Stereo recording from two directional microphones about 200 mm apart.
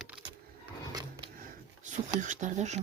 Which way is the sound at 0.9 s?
20° right (ahead or behind).